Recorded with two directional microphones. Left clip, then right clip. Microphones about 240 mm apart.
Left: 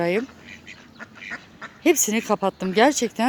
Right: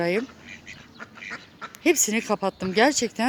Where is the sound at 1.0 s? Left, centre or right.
Centre.